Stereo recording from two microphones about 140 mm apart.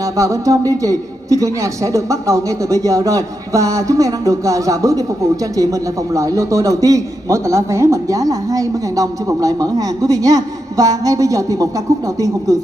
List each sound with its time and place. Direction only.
0.0 s a man's voice: 25° right (ahead or behind)